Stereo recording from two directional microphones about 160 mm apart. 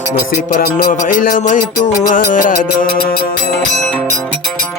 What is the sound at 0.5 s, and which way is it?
Music, 65° left (ahead or behind).